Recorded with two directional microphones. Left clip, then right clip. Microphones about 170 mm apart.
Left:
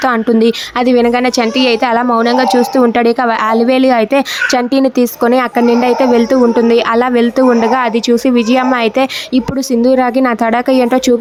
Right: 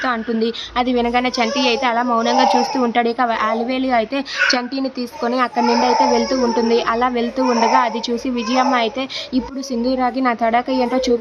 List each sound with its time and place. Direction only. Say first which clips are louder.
0.0 s speech: left 9 dB; 50° left (ahead or behind)